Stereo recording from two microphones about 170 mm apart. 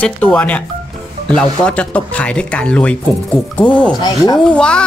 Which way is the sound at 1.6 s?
5° left (ahead or behind).